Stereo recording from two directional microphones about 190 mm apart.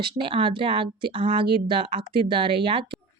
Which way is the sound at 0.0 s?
25° right (ahead or behind).